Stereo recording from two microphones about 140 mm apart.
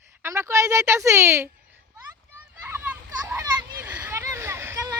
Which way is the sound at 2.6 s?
15° right (ahead or behind).